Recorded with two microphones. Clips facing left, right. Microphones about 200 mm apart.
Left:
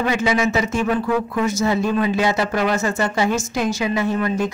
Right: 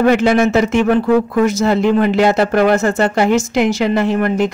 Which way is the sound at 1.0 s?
45° right (ahead or behind).